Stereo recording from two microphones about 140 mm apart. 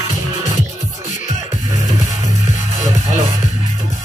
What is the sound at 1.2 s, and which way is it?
Music, 65° left (ahead or behind).